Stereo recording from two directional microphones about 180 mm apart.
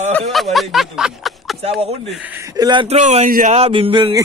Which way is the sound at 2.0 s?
5° right (ahead or behind).